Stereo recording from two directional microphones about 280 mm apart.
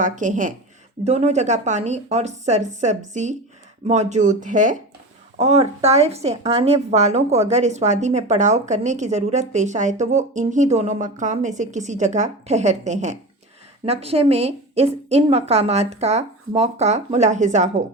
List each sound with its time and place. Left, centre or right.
0.0 s speech: right